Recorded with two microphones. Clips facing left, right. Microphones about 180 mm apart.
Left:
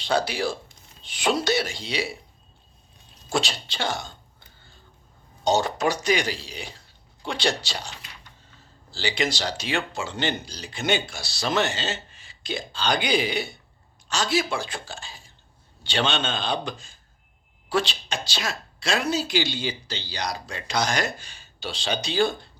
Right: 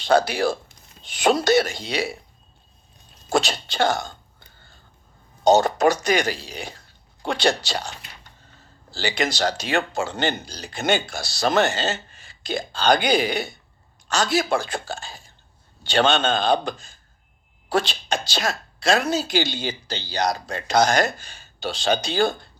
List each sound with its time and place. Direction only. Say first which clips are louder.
0.0 s a woman's voice: right 5 dB; 45° right (ahead or behind)
3.2 s a woman's voice: right 5 dB; 45° right (ahead or behind)
5.4 s a woman's voice: right 6 dB; 45° right (ahead or behind)